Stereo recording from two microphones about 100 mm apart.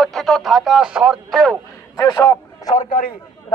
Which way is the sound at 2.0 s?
40° left (ahead or behind).